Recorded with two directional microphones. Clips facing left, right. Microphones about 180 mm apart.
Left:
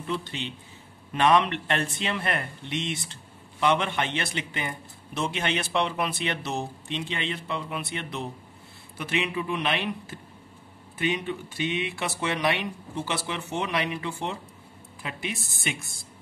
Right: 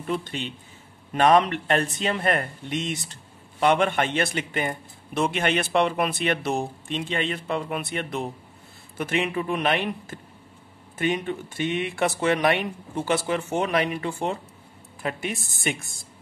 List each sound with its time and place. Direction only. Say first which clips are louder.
0.0 s speech: right 3 dB; 50° right (ahead or behind)